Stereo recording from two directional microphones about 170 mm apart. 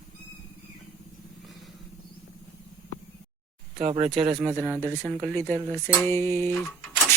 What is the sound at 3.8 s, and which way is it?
Speech, 40° right (ahead or behind).